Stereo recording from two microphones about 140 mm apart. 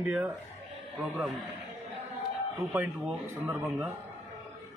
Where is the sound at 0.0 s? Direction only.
10° right (ahead or behind).